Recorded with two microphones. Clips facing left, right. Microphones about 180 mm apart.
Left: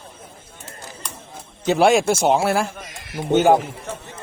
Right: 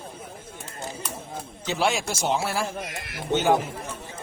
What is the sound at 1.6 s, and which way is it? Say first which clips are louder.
Speech: left 10 dB; 55° left (ahead or behind).